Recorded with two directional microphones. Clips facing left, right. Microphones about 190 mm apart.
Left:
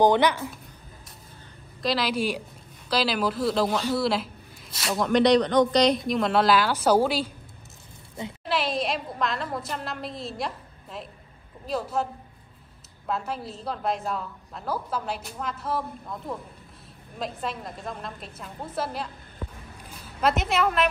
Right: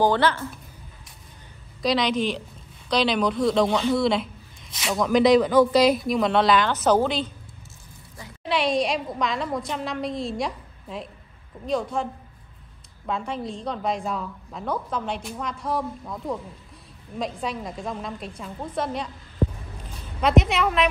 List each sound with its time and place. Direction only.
0.0 s speech: 15° left (ahead or behind)
1.8 s speech: 5° left (ahead or behind)
8.5 s a woman's voice: centre (ahead or behind)